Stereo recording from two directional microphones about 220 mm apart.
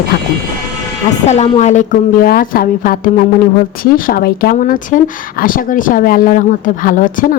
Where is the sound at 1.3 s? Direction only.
30° left (ahead or behind).